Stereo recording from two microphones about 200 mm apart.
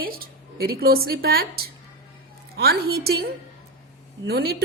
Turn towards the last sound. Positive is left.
turn(degrees=-50)  # may be behind; listen again after turning